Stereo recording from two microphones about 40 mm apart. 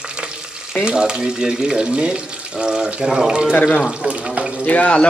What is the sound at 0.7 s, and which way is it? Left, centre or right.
Speech, centre.